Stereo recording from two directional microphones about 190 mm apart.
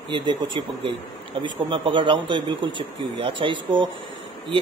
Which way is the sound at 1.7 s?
25° right (ahead or behind).